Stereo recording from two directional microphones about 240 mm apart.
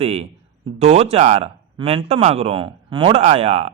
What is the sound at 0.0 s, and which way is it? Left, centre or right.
A man's voice, right.